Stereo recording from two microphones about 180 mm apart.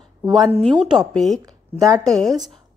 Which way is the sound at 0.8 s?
Centre (ahead or behind).